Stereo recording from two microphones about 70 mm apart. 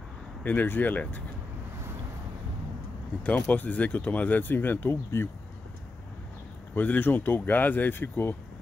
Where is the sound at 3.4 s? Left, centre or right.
Left.